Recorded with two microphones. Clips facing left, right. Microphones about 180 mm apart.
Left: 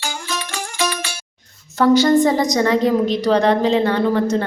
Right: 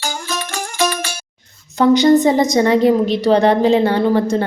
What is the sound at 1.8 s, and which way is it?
A woman's voice, 15° right (ahead or behind).